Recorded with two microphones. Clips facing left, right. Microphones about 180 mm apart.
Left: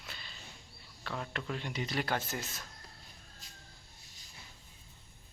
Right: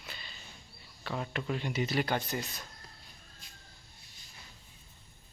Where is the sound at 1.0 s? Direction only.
5° right (ahead or behind).